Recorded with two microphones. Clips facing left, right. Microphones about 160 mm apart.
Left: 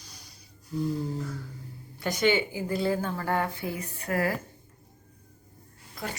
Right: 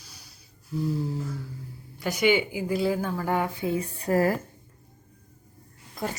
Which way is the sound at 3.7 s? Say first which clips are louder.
Right 6 dB; 30° right (ahead or behind).